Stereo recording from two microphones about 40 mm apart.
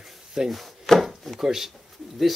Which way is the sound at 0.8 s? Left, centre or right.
Centre.